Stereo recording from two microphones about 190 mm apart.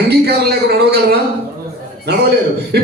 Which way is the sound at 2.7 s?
60° right (ahead or behind).